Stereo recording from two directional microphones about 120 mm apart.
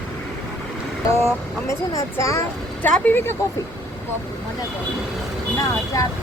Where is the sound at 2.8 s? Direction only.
15° left (ahead or behind).